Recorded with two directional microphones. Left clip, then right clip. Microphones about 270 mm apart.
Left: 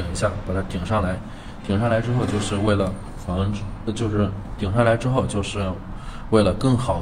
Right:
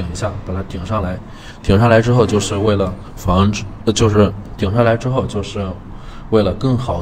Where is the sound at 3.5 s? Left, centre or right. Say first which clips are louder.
Right 11 dB; right.